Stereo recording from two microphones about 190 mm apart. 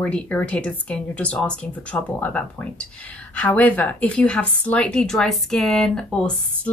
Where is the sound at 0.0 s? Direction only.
5° left (ahead or behind).